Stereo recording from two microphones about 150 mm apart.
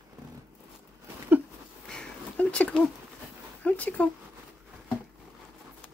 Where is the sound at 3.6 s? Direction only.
10° left (ahead or behind).